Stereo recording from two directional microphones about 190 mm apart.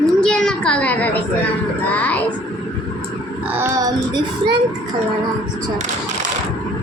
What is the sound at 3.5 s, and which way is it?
Child singing, 15° right (ahead or behind).